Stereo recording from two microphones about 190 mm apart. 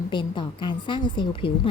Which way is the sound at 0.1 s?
25° left (ahead or behind).